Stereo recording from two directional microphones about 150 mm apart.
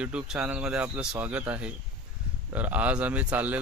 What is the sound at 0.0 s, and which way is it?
A man's voice, 5° right (ahead or behind).